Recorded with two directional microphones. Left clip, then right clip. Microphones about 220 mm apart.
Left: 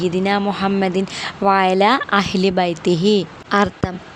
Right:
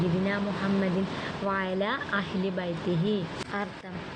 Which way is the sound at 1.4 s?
55° left (ahead or behind).